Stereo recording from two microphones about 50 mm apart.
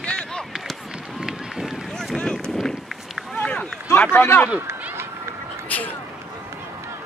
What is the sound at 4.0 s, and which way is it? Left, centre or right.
Speech, left.